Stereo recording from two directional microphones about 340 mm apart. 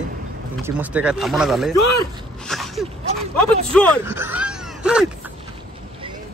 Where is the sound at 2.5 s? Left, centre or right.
Centre.